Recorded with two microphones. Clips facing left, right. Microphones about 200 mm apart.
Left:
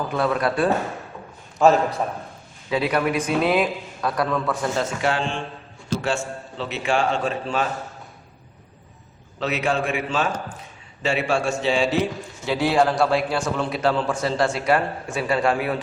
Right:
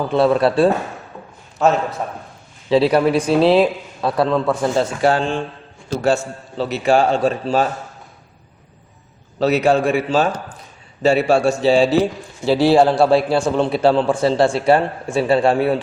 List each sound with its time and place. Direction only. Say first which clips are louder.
0.1 s a man's voice: right 9 dB; 30° right (ahead or behind)
1.6 s a man's voice: even; centre (ahead or behind)
2.6 s a man's voice: right 8 dB; 30° right (ahead or behind)
9.4 s a man's voice: right 8 dB; 40° right (ahead or behind)